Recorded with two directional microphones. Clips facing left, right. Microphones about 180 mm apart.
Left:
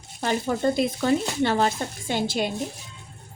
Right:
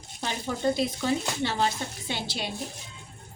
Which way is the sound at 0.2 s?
50° left (ahead or behind).